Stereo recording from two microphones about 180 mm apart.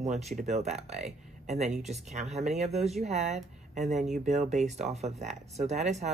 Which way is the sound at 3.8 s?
Centre (ahead or behind).